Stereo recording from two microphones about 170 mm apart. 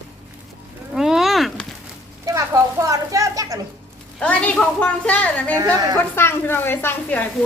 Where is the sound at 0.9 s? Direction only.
Centre (ahead or behind).